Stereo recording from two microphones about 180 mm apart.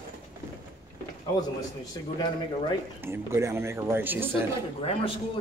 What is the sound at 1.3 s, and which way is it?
A man's voice, 25° left (ahead or behind).